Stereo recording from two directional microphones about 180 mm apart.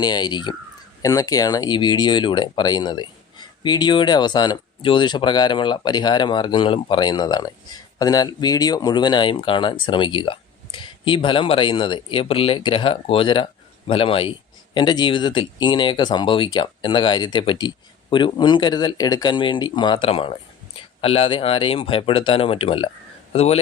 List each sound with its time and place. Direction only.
0.0 s speech: 25° left (ahead or behind)